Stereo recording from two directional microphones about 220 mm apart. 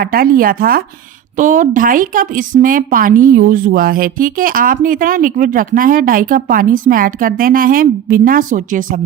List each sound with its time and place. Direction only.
0.0 s speech: 40° right (ahead or behind)